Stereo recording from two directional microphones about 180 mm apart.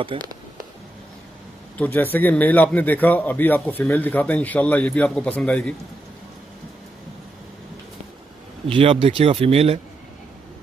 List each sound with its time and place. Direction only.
0.0 s speech: 25° right (ahead or behind)
1.8 s a man's voice: 10° left (ahead or behind)
8.6 s speech: 30° right (ahead or behind)